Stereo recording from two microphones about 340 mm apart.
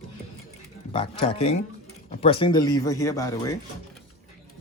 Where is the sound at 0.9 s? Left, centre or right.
Centre.